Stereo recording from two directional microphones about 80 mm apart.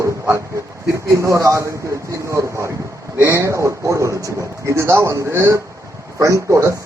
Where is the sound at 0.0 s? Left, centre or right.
Right.